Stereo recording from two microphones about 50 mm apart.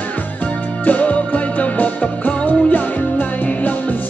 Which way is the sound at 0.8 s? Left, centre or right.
Left.